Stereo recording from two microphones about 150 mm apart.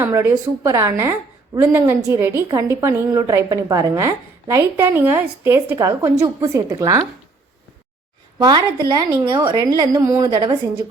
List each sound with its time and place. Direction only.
0.0 s a woman's voice: 15° right (ahead or behind)
8.4 s a woman's voice: 30° right (ahead or behind)
9.0 s a woman's voice: 15° right (ahead or behind)
9.3 s a woman's voice: 25° right (ahead or behind)